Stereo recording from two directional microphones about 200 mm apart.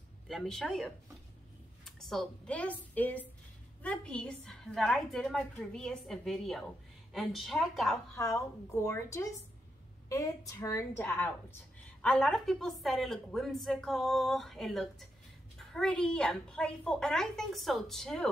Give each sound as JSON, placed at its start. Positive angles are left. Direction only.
{"t": 0.3, "sound": "a woman's voice", "side_deg": 0}
{"t": 8.2, "sound": "a woman's voice", "side_deg": 15}